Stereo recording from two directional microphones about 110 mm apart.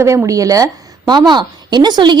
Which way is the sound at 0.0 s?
25° right (ahead or behind).